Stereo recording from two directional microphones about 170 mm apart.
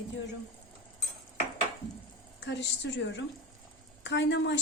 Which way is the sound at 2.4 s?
90° left.